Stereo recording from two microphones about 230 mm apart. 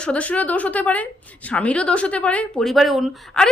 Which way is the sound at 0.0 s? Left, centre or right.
Centre.